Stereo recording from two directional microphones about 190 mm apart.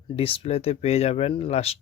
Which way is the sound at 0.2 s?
30° left (ahead or behind).